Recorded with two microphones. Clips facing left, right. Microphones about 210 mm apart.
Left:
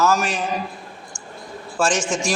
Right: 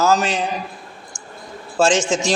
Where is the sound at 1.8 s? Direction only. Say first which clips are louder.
Right 4 dB; 25° right (ahead or behind).